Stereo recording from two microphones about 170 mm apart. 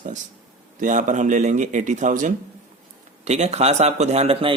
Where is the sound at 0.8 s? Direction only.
50° right (ahead or behind).